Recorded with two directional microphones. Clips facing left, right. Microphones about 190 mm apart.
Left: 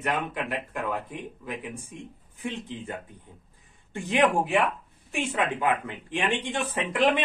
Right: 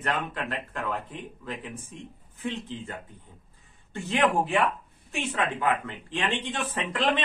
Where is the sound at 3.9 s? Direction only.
15° left (ahead or behind).